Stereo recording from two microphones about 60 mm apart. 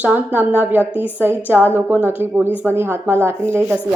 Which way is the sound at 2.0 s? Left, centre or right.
Right.